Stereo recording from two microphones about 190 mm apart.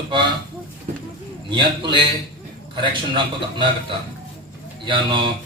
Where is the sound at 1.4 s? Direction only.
25° right (ahead or behind).